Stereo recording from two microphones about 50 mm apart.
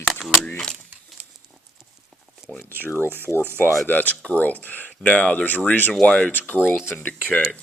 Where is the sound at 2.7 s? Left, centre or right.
Right.